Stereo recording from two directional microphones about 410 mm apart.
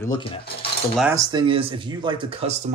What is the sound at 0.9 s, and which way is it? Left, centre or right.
Speech, centre.